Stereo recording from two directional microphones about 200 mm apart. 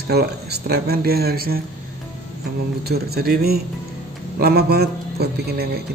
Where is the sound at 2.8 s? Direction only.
50° right (ahead or behind).